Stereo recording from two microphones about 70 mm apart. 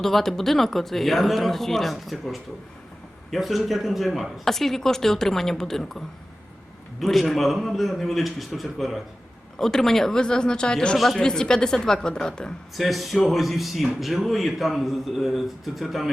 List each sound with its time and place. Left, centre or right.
0.0 s a man's voice: centre
7.0 s a man's voice: centre
10.9 s a man's voice: centre
12.7 s a man's voice: centre